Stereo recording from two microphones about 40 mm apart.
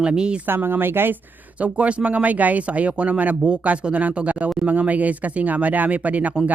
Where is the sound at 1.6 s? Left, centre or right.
Right.